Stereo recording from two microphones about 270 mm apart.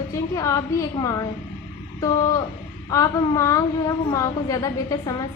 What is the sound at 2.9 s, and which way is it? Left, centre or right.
A woman's voice, centre.